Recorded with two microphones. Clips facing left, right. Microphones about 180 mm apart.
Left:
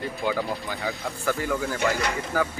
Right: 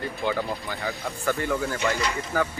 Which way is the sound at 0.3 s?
Centre (ahead or behind).